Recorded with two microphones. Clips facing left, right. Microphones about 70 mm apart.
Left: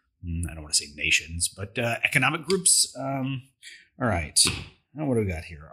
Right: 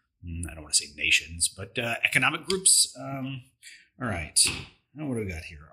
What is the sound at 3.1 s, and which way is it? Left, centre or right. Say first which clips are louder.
Speech: left 3 dB; left.